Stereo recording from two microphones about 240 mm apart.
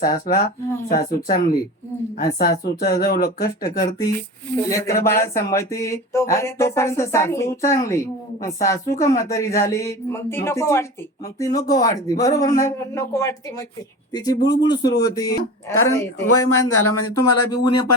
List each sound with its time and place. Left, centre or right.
0.0 s speech: left
4.5 s speech: centre
14.3 s speech: left
15.1 s speech: centre
15.7 s speech: left